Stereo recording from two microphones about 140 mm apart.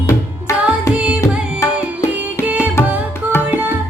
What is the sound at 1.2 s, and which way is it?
Music, 20° left (ahead or behind).